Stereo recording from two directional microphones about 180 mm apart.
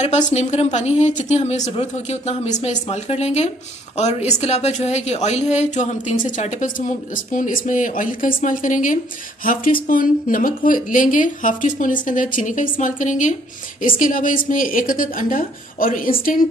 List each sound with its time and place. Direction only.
0.0 s a woman's voice: 40° left (ahead or behind)